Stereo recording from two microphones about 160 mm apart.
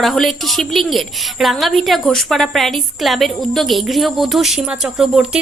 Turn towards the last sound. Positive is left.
turn(degrees=-5)  # may be behind; listen again after turning